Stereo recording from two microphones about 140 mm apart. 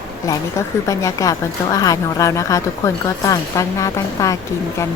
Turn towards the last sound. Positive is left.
turn(degrees=25)  # may be behind; listen again after turning